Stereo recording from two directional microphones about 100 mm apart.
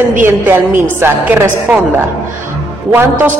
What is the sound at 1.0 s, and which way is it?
Speech, 20° right (ahead or behind).